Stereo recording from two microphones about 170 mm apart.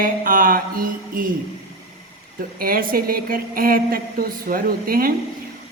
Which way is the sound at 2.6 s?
60° right (ahead or behind).